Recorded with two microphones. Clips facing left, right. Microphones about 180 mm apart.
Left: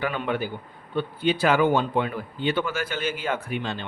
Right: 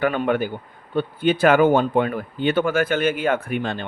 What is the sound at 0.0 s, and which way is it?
Speech, 50° right (ahead or behind).